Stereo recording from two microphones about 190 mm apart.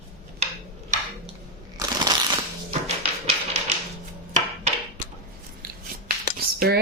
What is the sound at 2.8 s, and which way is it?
Tap, 35° right (ahead or behind).